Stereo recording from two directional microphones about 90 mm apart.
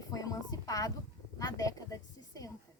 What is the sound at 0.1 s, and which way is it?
A woman's voice, 40° left (ahead or behind).